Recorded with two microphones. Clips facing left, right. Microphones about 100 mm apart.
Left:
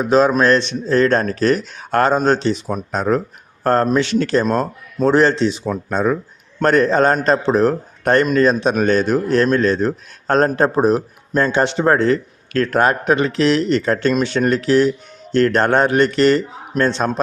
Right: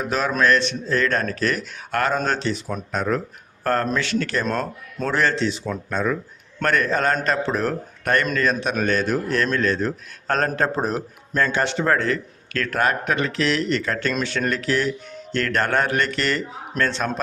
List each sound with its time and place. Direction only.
0.0 s a man's voice: 25° left (ahead or behind)